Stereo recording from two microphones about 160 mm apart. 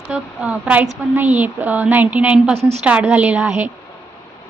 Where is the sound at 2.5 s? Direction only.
40° right (ahead or behind).